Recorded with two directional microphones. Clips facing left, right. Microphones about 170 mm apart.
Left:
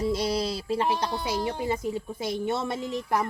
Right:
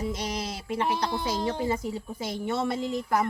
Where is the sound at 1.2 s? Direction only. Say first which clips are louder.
Right 1 dB; 15° left (ahead or behind).